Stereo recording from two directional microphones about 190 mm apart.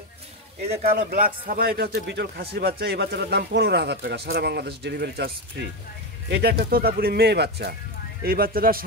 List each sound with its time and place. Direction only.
0.9 s speech: 50° right (ahead or behind)